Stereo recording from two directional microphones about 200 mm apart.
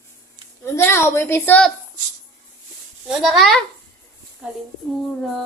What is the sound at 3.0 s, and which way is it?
A child's voice, centre (ahead or behind).